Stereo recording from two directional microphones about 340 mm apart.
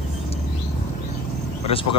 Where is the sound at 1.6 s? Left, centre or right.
Centre.